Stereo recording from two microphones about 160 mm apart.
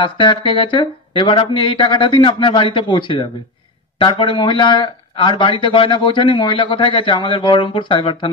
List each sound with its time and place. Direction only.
0.0 s speech: 30° left (ahead or behind)